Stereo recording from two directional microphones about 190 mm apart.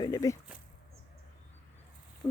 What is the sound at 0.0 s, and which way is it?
Speech, 20° left (ahead or behind).